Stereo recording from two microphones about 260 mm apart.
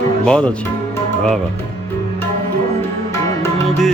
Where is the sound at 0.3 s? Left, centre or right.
Centre.